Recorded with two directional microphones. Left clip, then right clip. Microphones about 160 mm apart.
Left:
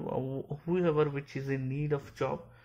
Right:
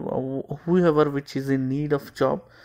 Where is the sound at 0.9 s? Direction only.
5° right (ahead or behind).